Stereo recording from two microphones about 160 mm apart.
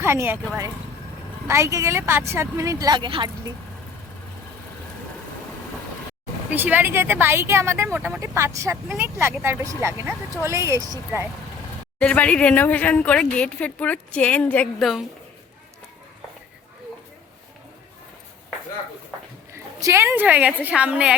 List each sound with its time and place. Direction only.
0.0 s speech: 15° right (ahead or behind)
1.5 s speech: 20° right (ahead or behind)
6.5 s speech: 10° right (ahead or behind)
11.9 s speech: 10° left (ahead or behind)
19.5 s speech: 15° right (ahead or behind)